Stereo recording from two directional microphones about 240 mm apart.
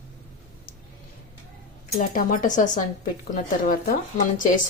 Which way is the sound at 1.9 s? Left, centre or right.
Left.